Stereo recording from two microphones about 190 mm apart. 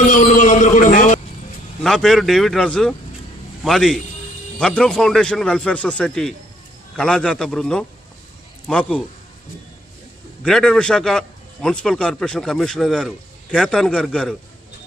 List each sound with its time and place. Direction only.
0.1 s a sound: 45° left (ahead or behind)
1.8 s a man's voice: centre (ahead or behind)
10.4 s a man's voice: 5° left (ahead or behind)